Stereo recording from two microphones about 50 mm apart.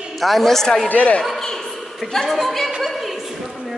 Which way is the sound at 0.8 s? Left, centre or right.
Left.